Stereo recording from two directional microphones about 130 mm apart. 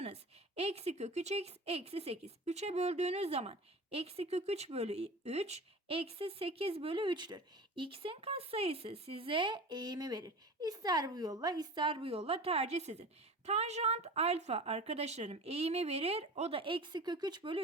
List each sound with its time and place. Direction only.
0.0 s a woman's voice: 50° right (ahead or behind); by 17.6 s 35° right (ahead or behind)